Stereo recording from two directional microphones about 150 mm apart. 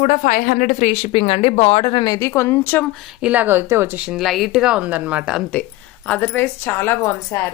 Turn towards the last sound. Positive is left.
turn(degrees=20)  # may be behind; listen again after turning